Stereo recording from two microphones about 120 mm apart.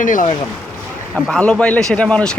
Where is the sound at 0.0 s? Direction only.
90° left.